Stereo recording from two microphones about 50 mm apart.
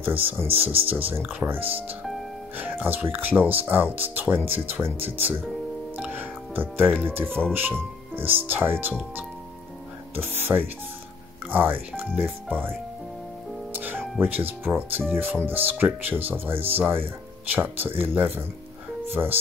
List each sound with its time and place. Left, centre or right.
0.0 s speech: right
5.9 s music: right
7.2 s speech: centre
7.5 s speech: right
10.1 s speech: right
13.7 s music: right
14.2 s speech: right